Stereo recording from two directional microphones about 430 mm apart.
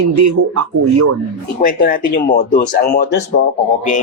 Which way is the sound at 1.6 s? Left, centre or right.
Centre.